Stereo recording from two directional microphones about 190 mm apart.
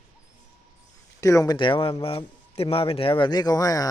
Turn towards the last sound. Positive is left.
turn(degrees=20)  # may be behind; listen again after turning